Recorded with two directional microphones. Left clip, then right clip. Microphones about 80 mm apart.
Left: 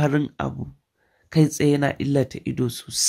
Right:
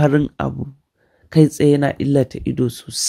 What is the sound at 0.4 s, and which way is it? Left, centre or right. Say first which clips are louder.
Speech: right 5 dB; right.